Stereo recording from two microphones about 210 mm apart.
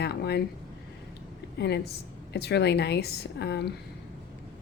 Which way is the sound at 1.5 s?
55° left (ahead or behind).